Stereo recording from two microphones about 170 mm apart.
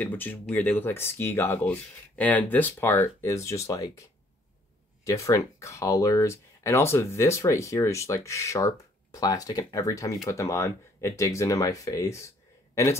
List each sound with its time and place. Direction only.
0.0 s speech: 10° left (ahead or behind)
5.0 s speech: 20° left (ahead or behind)